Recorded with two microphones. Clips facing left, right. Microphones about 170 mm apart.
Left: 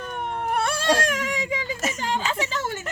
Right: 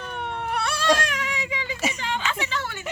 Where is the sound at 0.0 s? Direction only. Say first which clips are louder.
Left 2 dB; 45° left (ahead or behind).